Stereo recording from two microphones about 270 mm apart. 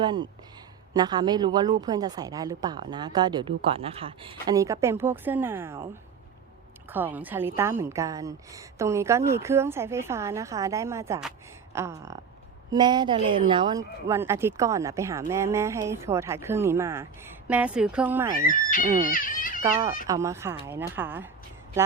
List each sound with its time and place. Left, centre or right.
0.0 s a woman's voice: centre
6.9 s a woman's voice: centre
18.4 s speech: left
19.1 s a sound: left
20.1 s a woman's voice: centre